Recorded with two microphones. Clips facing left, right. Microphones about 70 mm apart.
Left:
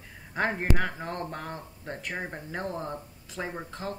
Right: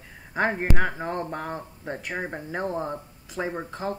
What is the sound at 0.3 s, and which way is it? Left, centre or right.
Speech, centre.